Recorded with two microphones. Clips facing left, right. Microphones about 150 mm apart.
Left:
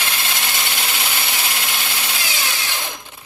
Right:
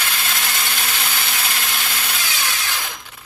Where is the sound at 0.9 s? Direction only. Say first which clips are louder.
Left 1 dB; 20° left (ahead or behind).